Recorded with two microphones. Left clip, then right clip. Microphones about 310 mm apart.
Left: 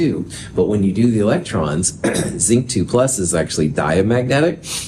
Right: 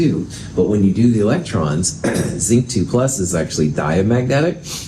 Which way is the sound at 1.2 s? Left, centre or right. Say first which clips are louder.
Even; left.